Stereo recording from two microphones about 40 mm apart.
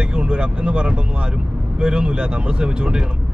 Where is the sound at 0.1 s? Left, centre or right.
Right.